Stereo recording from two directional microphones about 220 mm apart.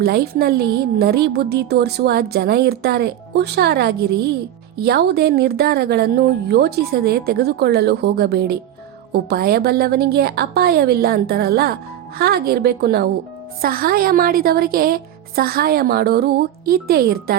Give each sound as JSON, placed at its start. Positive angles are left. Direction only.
{"t": 0.0, "sound": "a woman's voice", "side_deg": -45}